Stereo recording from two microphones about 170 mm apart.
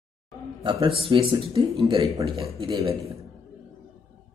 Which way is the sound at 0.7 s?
30° right (ahead or behind).